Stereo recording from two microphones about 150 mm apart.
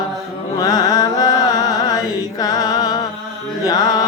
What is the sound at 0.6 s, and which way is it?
Carnatic music, 25° left (ahead or behind).